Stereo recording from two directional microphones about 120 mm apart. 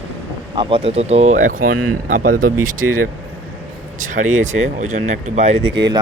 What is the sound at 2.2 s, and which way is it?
Speech, 90° right.